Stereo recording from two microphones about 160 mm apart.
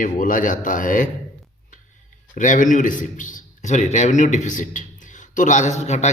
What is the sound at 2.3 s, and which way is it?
A man's voice, 55° left (ahead or behind).